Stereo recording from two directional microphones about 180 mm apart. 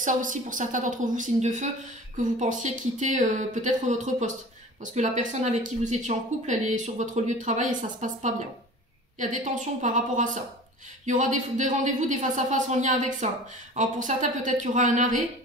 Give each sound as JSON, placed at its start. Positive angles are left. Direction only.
{"t": 0.0, "sound": "speech", "side_deg": -45}
{"t": 9.2, "sound": "speech", "side_deg": -45}